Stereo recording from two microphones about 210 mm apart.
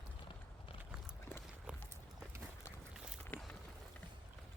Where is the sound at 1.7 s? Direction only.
5° right (ahead or behind).